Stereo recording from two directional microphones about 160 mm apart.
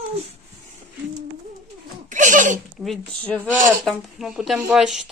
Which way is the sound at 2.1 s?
50° right (ahead or behind).